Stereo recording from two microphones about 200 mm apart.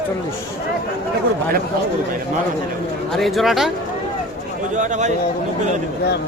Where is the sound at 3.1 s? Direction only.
Centre (ahead or behind).